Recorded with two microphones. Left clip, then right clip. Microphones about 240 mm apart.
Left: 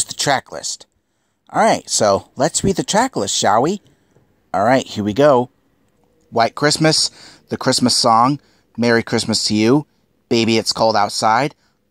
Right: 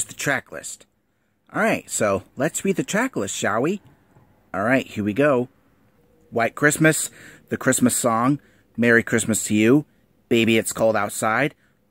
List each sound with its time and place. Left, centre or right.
0.1 s speech: left